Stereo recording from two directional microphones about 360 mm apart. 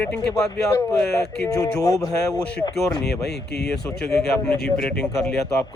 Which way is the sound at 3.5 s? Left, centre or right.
Left.